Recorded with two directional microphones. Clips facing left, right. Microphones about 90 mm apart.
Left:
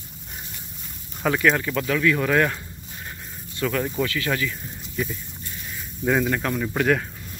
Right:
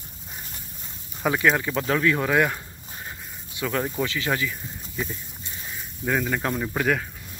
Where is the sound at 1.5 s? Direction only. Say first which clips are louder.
Left 1 dB; 20° right (ahead or behind).